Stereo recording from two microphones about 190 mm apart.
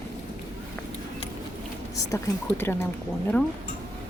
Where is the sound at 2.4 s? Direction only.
10° left (ahead or behind).